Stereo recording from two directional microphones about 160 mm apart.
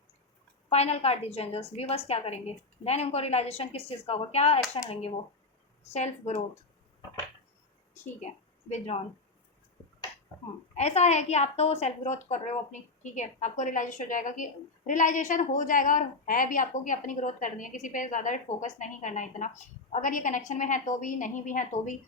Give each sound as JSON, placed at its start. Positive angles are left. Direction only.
{"t": 0.7, "sound": "a woman's voice", "side_deg": 40}
{"t": 10.8, "sound": "a woman's voice", "side_deg": 45}